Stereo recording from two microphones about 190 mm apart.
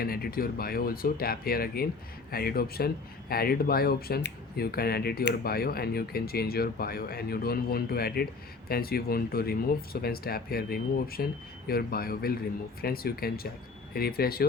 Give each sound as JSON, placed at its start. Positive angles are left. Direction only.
{"t": 0.0, "sound": "speech", "side_deg": 50}